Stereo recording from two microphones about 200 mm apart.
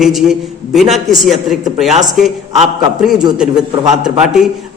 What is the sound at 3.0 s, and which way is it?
A man's voice, 5° right (ahead or behind).